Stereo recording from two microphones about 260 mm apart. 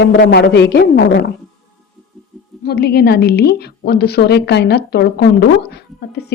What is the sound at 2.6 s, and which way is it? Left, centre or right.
Speech, left.